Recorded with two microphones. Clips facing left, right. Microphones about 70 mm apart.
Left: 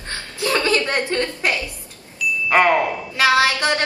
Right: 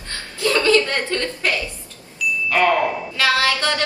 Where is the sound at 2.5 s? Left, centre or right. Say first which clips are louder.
Left 3 dB; left.